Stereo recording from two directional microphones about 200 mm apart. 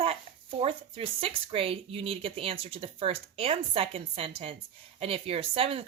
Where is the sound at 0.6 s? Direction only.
30° right (ahead or behind).